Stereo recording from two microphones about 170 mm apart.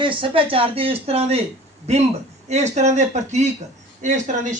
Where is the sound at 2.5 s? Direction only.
45° right (ahead or behind).